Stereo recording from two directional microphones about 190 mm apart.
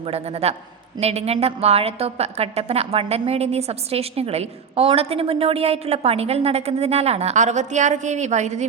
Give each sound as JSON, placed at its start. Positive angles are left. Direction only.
{"t": 0.1, "sound": "a woman's voice", "side_deg": -35}